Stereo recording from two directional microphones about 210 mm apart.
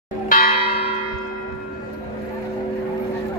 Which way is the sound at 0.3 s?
40° left (ahead or behind).